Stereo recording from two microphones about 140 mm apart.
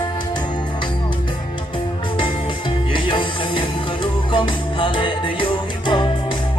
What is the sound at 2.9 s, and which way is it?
Music, 35° left (ahead or behind).